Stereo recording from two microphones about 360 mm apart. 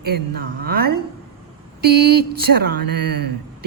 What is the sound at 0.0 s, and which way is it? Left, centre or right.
A woman's voice, right.